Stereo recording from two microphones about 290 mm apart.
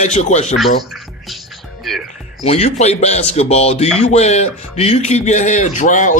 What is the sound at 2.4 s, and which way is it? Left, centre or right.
Speech, left.